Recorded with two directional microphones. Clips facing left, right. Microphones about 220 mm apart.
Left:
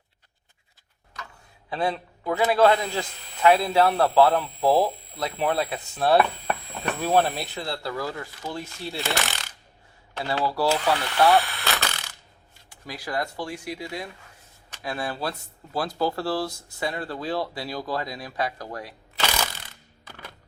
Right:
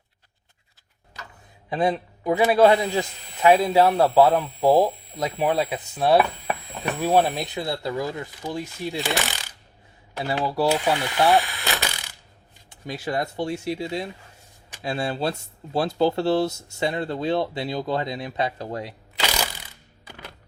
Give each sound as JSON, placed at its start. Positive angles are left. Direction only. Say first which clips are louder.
{"t": 1.7, "sound": "a man's voice", "louder": "right 4 dB", "side_deg": -20}
{"t": 6.1, "sound": "a sound", "louder": "right 1 dB", "side_deg": 0}
{"t": 6.9, "sound": "a man's voice", "louder": "right 2 dB", "side_deg": -15}
{"t": 10.2, "sound": "a man's voice", "louder": "right 2 dB", "side_deg": -20}
{"t": 11.3, "sound": "speech", "louder": "right 1 dB", "side_deg": 0}
{"t": 11.8, "sound": "coin", "louder": "right 1 dB", "side_deg": -15}
{"t": 12.8, "sound": "speech", "louder": "right 3 dB", "side_deg": -25}
{"t": 19.2, "sound": "mechanisms", "louder": "right 1 dB", "side_deg": -10}